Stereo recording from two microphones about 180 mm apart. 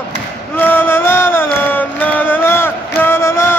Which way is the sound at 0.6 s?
10° left (ahead or behind).